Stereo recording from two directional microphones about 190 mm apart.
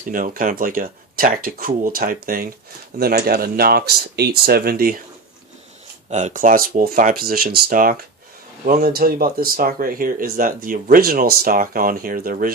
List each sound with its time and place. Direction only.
0.1 s speech: 45° right (ahead or behind)
6.1 s speech: 35° right (ahead or behind)